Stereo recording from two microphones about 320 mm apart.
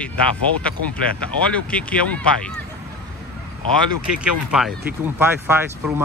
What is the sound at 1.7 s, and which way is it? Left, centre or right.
Speech, centre.